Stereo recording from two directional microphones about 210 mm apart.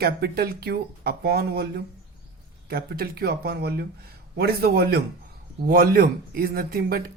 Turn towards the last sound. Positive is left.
turn(degrees=-45)  # may be behind; listen again after turning